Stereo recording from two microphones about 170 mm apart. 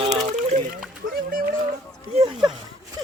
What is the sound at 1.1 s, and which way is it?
Speech, 55° right (ahead or behind).